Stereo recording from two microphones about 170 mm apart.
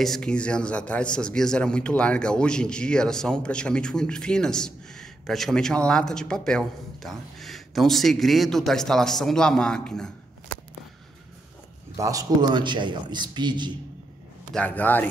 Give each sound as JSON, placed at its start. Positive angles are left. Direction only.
{"t": 0.0, "sound": "a man's voice", "side_deg": 5}
{"t": 12.0, "sound": "a man's voice", "side_deg": -20}
{"t": 14.5, "sound": "a man's voice", "side_deg": 10}